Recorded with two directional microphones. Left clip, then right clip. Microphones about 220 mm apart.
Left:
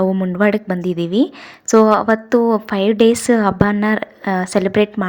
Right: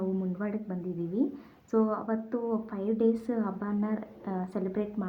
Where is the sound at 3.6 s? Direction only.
35° left (ahead or behind).